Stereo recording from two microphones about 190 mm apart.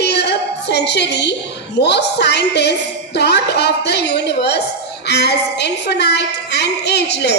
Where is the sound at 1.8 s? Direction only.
65° left (ahead or behind).